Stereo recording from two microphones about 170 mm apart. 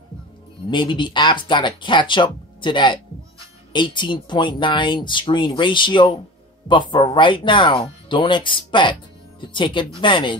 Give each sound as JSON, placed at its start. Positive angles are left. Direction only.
{"t": 0.7, "sound": "speech", "side_deg": 30}